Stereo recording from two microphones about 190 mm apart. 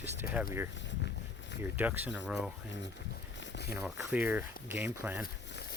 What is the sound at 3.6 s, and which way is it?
Speech, 10° right (ahead or behind).